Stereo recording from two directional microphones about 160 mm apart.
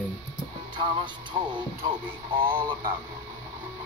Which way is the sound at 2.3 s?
30° right (ahead or behind).